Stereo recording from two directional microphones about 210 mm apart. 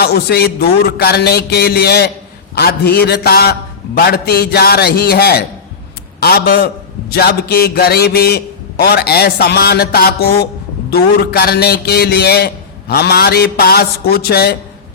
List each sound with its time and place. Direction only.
0.0 s a man's voice: 50° left (ahead or behind)